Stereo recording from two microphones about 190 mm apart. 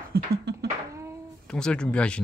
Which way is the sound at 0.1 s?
60° right (ahead or behind).